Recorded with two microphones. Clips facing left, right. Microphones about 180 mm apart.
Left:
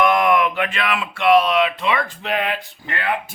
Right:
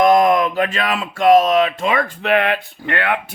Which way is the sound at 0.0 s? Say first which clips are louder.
Right 4 dB; 40° right (ahead or behind).